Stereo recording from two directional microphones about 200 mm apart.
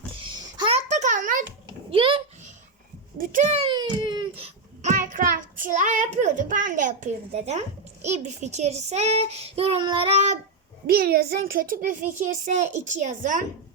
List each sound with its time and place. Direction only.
0.6 s a sound: 35° right (ahead or behind)
1.9 s babbling: 25° right (ahead or behind)
3.2 s a sound: 40° right (ahead or behind); by 4.4 s 20° right (ahead or behind)
4.8 s child singing: 40° right (ahead or behind)
8.0 s a child's voice: 35° right (ahead or behind)
10.8 s a child's voice: 50° right (ahead or behind)